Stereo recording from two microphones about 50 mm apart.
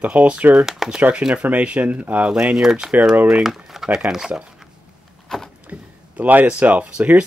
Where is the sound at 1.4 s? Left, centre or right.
Right.